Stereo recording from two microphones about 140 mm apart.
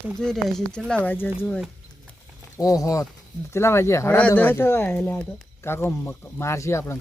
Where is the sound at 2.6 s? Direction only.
25° left (ahead or behind).